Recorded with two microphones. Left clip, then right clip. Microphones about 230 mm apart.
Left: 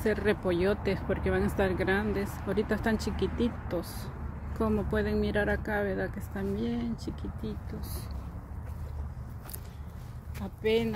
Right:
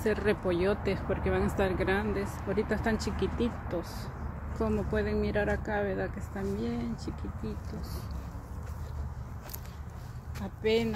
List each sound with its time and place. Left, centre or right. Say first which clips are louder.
0.0 s speech: left 1 dB; centre
10.4 s speech: even; centre